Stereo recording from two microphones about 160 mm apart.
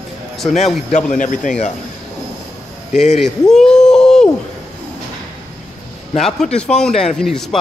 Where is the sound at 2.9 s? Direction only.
45° left (ahead or behind).